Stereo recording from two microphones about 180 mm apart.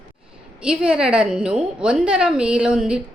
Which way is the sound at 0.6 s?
5° right (ahead or behind).